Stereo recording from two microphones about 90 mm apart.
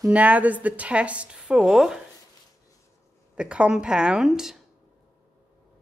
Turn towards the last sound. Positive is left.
turn(degrees=-5)  # may be behind; listen again after turning